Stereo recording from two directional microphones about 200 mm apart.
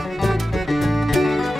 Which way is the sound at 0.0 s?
Centre (ahead or behind).